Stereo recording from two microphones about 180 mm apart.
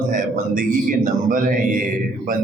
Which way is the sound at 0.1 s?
50° right (ahead or behind).